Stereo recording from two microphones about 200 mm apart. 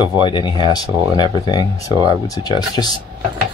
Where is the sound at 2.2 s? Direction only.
20° left (ahead or behind).